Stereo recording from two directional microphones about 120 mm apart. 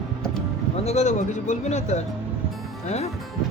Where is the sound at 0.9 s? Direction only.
75° left (ahead or behind).